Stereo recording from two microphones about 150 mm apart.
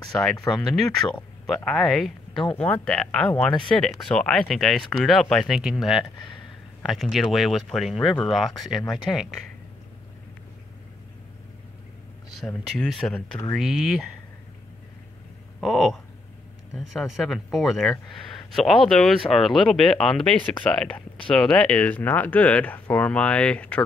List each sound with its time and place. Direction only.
0.1 s speech: centre (ahead or behind)
12.4 s speech: centre (ahead or behind)
15.6 s speech: centre (ahead or behind)